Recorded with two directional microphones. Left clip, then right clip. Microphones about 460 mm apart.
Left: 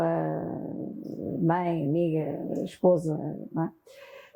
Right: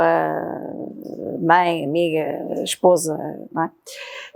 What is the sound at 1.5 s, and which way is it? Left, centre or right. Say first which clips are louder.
Speech: right 12 dB; centre.